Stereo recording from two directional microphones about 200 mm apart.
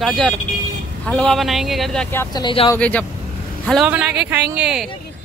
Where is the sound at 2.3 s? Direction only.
25° left (ahead or behind).